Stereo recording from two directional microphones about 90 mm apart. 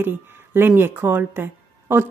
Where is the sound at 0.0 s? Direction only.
25° right (ahead or behind).